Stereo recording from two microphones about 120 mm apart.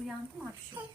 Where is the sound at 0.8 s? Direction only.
15° right (ahead or behind).